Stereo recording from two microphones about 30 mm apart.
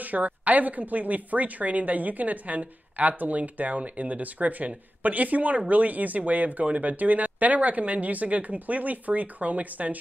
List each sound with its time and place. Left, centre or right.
0.1 s a woman's voice: right